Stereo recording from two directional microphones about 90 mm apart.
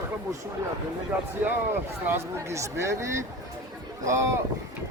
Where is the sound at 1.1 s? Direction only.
15° right (ahead or behind).